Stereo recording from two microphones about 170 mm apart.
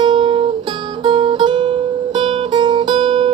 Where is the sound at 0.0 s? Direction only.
30° right (ahead or behind).